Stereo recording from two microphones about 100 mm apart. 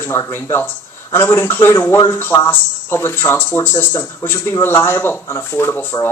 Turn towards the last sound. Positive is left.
turn(degrees=20)  # may be behind; listen again after turning